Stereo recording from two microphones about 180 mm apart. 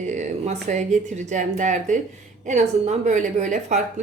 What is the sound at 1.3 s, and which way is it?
A woman's voice, 40° right (ahead or behind).